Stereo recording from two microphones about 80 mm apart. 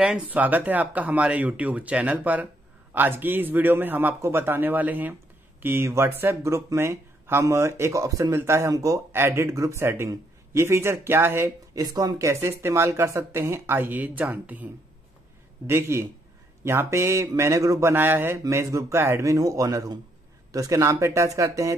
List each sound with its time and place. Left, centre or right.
0.3 s speech: right
9.1 s speech: right
11.7 s speech: right
13.7 s speech: right
15.6 s speech: right
18.4 s speech: right